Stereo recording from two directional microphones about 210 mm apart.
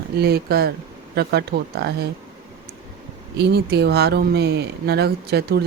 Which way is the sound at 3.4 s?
50° right (ahead or behind).